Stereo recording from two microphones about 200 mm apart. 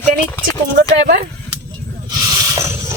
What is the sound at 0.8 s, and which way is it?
Speech, 50° right (ahead or behind).